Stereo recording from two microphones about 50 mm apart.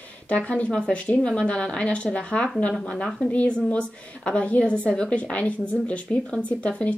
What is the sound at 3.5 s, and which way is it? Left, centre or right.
Speech, centre.